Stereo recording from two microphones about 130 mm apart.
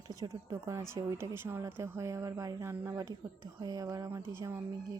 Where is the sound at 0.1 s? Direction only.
25° right (ahead or behind).